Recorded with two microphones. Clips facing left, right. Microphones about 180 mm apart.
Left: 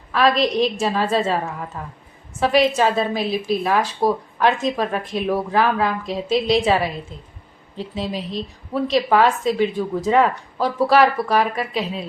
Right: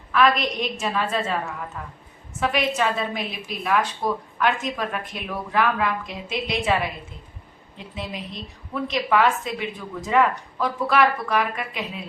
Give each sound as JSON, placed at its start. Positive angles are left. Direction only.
{"t": 0.1, "sound": "a woman's voice", "side_deg": 35}